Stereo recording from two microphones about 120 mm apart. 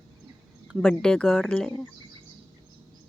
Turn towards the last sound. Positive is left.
turn(degrees=5)  # may be behind; listen again after turning